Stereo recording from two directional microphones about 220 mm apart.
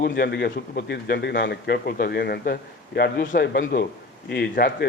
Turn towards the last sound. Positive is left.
turn(degrees=45)  # may be behind; listen again after turning